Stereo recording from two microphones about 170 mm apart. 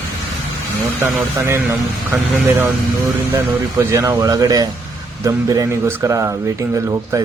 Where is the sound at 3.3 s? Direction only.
15° right (ahead or behind).